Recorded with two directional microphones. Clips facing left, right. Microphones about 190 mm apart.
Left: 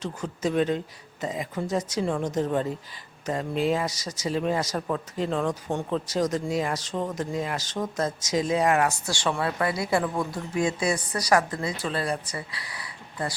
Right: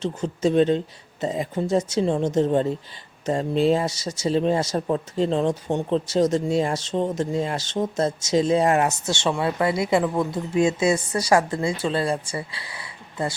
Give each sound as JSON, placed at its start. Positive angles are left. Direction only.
{"t": 0.0, "sound": "speech", "side_deg": -25}